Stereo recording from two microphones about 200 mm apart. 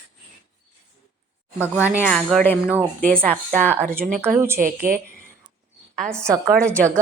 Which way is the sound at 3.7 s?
10° right (ahead or behind).